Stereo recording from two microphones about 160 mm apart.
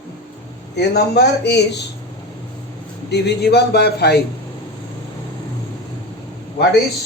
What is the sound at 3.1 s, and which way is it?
Speech, 90° left.